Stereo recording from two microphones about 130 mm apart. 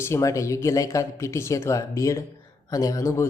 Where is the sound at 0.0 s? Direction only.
25° left (ahead or behind).